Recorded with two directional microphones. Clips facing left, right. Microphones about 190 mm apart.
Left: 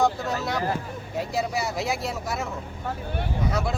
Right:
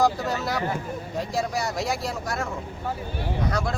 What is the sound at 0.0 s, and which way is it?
Speech, centre (ahead or behind).